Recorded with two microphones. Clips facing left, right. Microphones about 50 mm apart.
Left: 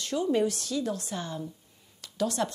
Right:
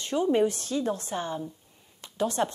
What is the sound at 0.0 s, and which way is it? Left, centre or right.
A woman's voice, right.